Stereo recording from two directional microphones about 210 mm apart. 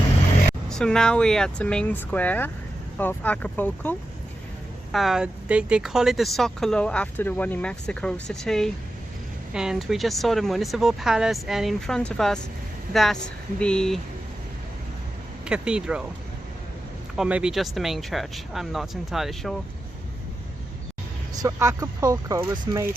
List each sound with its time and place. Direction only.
0.7 s speech: 5° left (ahead or behind)
15.4 s speech: 5° right (ahead or behind)
17.2 s speech: 5° right (ahead or behind)
21.3 s speech: 15° right (ahead or behind)